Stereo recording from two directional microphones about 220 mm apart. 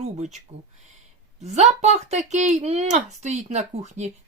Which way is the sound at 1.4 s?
30° right (ahead or behind).